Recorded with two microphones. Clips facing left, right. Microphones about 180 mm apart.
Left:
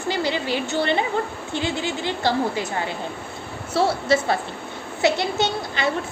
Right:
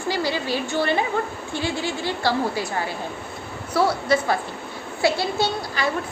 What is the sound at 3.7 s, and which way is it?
A woman's voice, 25° left (ahead or behind).